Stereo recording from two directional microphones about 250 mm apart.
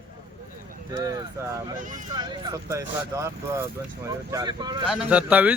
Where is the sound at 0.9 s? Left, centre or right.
Centre.